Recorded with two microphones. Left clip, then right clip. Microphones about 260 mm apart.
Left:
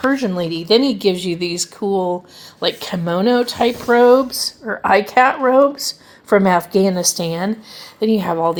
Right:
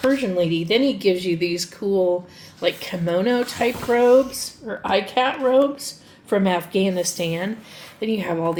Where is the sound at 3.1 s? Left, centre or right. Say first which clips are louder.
Left 4 dB; left.